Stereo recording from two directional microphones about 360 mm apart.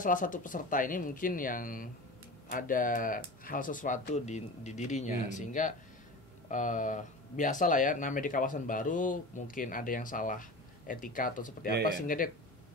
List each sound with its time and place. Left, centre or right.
0.0 s speech: left
11.7 s speech: right